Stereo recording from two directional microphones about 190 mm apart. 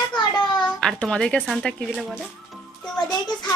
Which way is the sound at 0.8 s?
5° left (ahead or behind).